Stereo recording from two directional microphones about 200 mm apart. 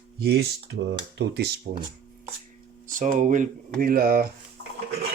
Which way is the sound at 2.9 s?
40° right (ahead or behind).